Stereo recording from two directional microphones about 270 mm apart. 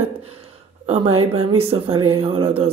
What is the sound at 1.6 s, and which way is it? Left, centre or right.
Speech, right.